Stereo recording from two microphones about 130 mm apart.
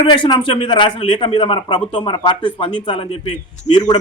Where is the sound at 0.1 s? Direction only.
35° left (ahead or behind).